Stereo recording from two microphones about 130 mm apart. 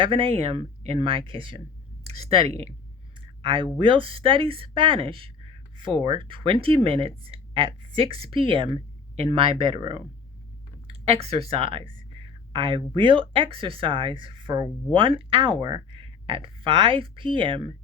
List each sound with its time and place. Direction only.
0.0 s speech: 40° right (ahead or behind)
3.2 s a sound: 40° right (ahead or behind)
3.8 s speech: 40° right (ahead or behind)